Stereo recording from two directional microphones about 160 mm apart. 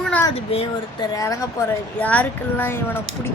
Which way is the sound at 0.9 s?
20° left (ahead or behind).